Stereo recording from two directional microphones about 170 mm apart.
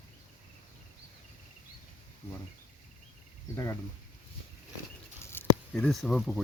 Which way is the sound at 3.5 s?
15° left (ahead or behind).